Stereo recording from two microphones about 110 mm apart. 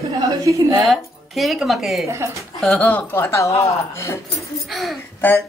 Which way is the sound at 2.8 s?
20° left (ahead or behind).